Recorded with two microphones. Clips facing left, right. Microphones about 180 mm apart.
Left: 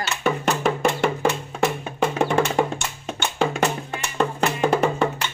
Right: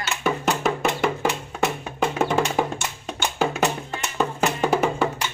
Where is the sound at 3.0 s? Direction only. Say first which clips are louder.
Left 1 dB; centre (ahead or behind).